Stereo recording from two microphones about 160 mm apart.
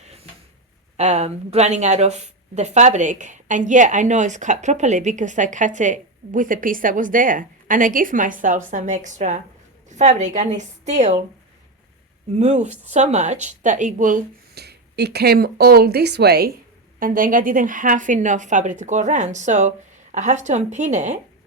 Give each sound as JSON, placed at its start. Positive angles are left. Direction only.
{"t": 0.9, "sound": "a woman's voice", "side_deg": -45}
{"t": 12.4, "sound": "a woman's voice", "side_deg": -45}
{"t": 14.5, "sound": "speech", "side_deg": -90}
{"t": 17.0, "sound": "a woman's voice", "side_deg": -60}